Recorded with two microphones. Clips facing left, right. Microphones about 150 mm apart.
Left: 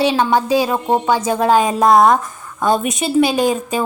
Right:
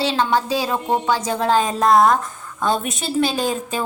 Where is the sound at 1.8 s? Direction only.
Centre (ahead or behind).